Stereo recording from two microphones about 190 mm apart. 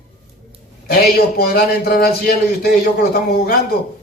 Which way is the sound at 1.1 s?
55° left (ahead or behind).